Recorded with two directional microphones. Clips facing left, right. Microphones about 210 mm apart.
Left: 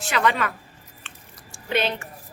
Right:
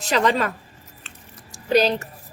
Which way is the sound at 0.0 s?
40° right (ahead or behind).